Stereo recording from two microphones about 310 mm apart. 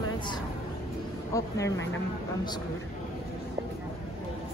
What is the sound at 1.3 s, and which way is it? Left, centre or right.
Speech, centre.